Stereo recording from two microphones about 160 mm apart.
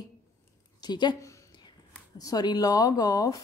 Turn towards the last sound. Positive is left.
turn(degrees=20)  # may be behind; listen again after turning